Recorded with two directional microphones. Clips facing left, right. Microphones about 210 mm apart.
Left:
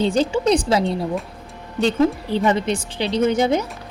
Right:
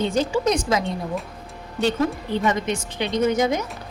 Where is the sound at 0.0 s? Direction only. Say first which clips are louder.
Left 3 dB; 30° left (ahead or behind).